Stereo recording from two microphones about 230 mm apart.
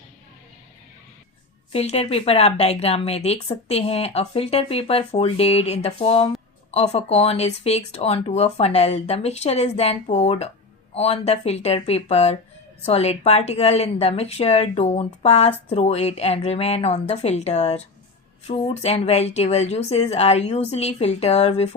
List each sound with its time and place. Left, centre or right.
1.7 s a woman's voice: left